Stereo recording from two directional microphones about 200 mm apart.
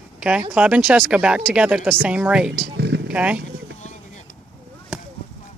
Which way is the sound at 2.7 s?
60° right (ahead or behind).